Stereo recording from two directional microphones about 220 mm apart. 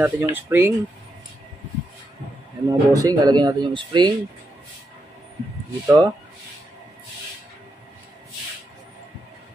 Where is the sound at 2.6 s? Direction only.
15° right (ahead or behind).